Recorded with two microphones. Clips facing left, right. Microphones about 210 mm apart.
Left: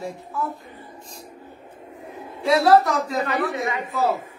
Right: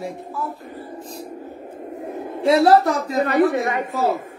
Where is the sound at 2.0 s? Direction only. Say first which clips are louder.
Right 7 dB; 55° right (ahead or behind).